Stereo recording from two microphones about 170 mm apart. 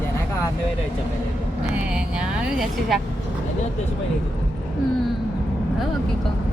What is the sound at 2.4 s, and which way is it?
Speech, centre (ahead or behind).